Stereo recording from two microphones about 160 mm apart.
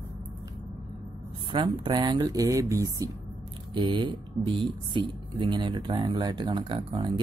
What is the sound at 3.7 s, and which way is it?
Speech, 30° right (ahead or behind).